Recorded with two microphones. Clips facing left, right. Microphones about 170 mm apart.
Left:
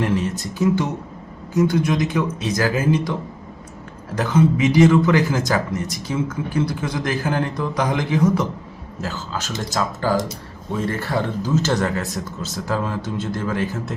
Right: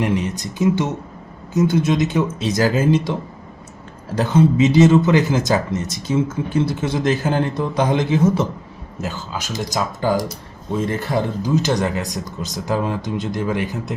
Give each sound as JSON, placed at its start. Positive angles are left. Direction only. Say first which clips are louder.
{"t": 0.0, "sound": "speech", "louder": "right 1 dB", "side_deg": -15}
{"t": 4.1, "sound": "speech", "louder": "right 2 dB", "side_deg": -30}